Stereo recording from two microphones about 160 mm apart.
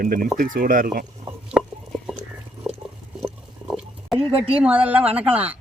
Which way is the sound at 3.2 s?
Centre (ahead or behind).